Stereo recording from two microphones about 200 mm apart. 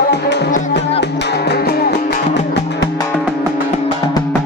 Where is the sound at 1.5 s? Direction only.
50° left (ahead or behind).